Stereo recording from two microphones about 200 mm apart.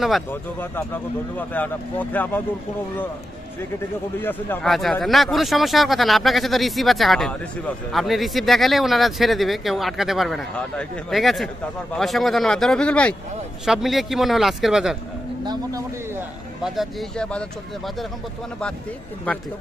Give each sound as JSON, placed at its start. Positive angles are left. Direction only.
{"t": 0.3, "sound": "speech", "side_deg": 10}
{"t": 4.2, "sound": "speech", "side_deg": 10}
{"t": 15.4, "sound": "speech", "side_deg": -20}
{"t": 16.6, "sound": "speech", "side_deg": 0}